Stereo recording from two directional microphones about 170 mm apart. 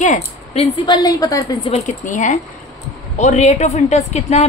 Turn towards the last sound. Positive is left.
turn(degrees=40)  # may be behind; listen again after turning